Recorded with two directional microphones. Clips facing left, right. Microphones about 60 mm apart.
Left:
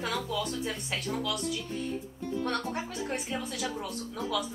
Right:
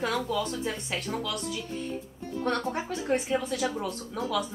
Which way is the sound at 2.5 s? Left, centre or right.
Centre.